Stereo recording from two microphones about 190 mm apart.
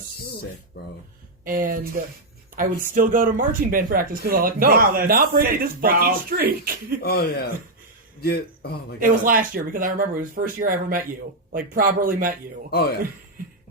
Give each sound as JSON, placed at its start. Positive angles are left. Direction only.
{"t": 0.7, "sound": "a man's voice", "side_deg": 55}
{"t": 1.5, "sound": "speech", "side_deg": -45}
{"t": 7.0, "sound": "a man's voice", "side_deg": 55}
{"t": 9.0, "sound": "speech", "side_deg": -45}